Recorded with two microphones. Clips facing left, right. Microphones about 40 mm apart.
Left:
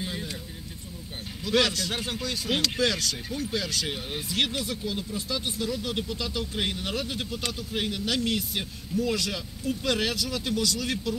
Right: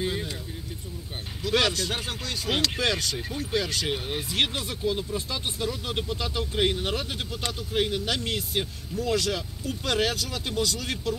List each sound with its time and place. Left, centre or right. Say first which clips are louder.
0.0 s vehicle: right 5 dB; right
1.7 s speech: right 2 dB; right
2.0 s speech: left 1 dB; centre
2.4 s speech: even; right
7.7 s speech: right 6 dB; right
8.0 s speech: left 2 dB; right